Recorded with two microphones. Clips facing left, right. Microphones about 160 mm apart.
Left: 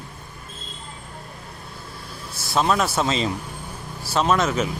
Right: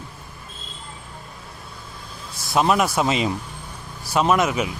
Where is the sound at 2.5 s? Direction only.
15° right (ahead or behind).